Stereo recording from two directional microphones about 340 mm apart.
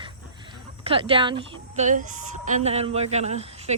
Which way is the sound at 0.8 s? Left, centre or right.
Centre.